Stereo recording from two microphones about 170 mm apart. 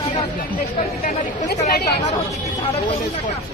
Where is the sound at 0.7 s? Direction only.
50° left (ahead or behind); by 1.8 s 70° left (ahead or behind).